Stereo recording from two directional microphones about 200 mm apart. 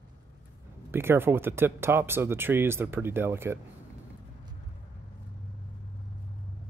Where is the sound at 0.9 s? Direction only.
10° right (ahead or behind).